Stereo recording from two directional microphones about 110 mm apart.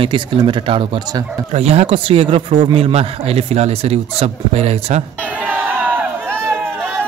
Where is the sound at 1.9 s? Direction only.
55° right (ahead or behind); by 5.0 s 70° right (ahead or behind).